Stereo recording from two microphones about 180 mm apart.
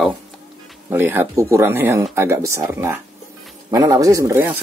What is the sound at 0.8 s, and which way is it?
Speech, 10° right (ahead or behind).